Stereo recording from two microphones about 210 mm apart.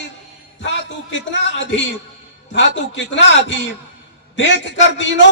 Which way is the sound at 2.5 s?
60° left (ahead or behind).